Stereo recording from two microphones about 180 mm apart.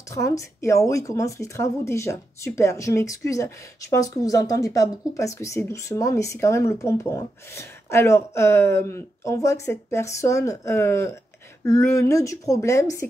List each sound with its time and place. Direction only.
0.1 s speech: 15° left (ahead or behind)